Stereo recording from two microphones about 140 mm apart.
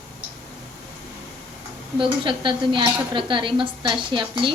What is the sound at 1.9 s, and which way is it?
A woman's voice, 35° right (ahead or behind).